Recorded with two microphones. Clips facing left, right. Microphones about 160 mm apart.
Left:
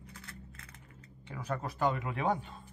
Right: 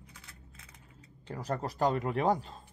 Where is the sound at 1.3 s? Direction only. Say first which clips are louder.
Right 3 dB; 35° right (ahead or behind).